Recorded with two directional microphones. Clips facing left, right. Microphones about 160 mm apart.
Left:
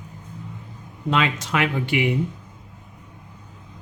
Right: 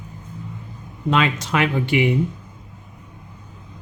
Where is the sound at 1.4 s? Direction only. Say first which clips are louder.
Right 2 dB; 30° right (ahead or behind).